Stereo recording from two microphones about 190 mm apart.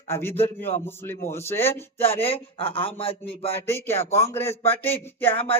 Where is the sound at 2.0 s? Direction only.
30° left (ahead or behind).